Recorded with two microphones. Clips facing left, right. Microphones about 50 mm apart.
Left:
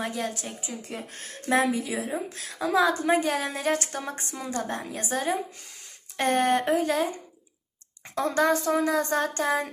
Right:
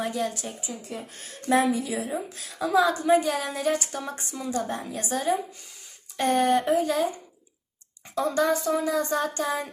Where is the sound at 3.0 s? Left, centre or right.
Left.